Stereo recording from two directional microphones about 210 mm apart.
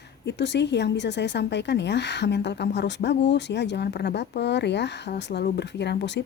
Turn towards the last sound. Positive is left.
turn(degrees=55)  # may be behind; listen again after turning